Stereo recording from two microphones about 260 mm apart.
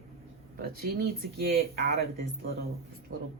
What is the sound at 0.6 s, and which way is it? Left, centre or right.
Speech, right.